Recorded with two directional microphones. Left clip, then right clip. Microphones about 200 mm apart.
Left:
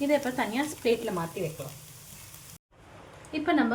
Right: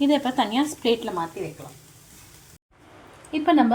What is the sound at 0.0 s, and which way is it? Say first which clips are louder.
Speech: right 5 dB; 10° right (ahead or behind).